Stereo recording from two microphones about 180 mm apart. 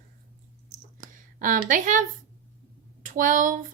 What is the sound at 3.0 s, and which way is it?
Speech, 45° right (ahead or behind).